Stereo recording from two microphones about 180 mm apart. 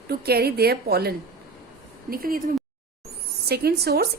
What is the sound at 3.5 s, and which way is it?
Speech, 60° right (ahead or behind).